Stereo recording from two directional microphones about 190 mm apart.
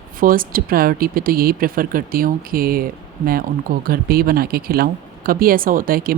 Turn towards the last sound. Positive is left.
turn(degrees=-50)  # may be behind; listen again after turning